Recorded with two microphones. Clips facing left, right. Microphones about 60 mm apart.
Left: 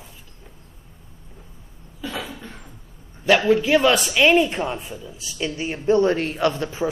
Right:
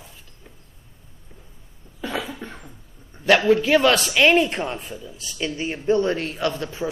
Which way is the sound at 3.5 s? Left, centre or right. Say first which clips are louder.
Even; centre.